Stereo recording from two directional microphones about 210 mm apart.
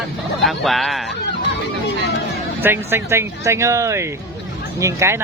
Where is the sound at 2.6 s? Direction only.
10° right (ahead or behind).